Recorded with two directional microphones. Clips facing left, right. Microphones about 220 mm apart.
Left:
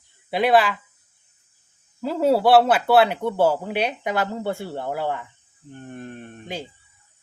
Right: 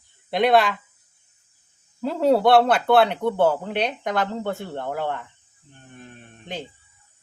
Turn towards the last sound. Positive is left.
turn(degrees=10)  # may be behind; listen again after turning